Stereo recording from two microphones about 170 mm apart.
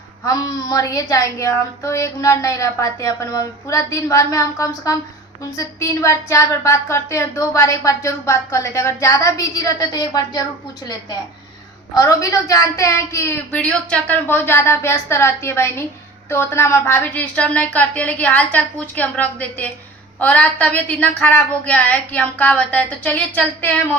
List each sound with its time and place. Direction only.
0.3 s a woman's voice: 20° left (ahead or behind)
11.9 s a woman's voice: 20° left (ahead or behind)